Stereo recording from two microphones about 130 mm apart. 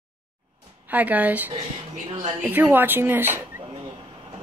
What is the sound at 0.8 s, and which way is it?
Speech, 10° right (ahead or behind).